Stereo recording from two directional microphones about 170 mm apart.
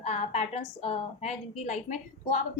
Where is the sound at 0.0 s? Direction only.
40° left (ahead or behind).